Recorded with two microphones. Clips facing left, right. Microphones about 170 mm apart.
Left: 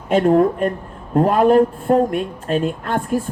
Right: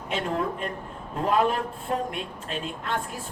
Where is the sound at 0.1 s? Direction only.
50° left (ahead or behind).